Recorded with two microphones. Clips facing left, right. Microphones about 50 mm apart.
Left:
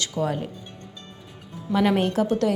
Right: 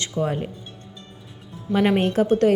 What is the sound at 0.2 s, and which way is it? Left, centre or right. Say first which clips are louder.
Speech: right 2 dB; right.